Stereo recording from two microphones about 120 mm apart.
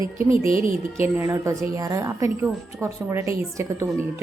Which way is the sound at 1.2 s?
25° right (ahead or behind).